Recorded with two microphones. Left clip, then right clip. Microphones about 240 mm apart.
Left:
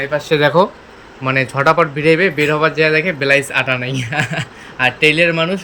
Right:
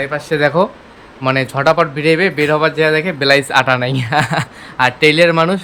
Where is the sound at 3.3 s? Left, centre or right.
Centre.